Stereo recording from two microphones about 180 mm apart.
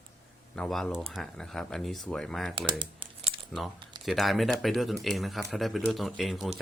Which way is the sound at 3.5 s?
Centre (ahead or behind).